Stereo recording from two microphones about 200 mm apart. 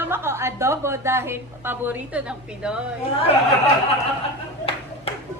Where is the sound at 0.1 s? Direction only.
10° right (ahead or behind).